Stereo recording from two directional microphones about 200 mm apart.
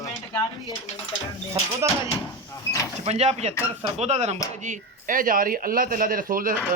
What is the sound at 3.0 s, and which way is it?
Speech, 30° right (ahead or behind).